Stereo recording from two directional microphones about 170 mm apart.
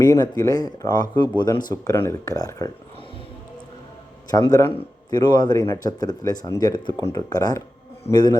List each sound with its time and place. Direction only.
0.0 s speech: 20° left (ahead or behind)
4.3 s speech: 20° left (ahead or behind)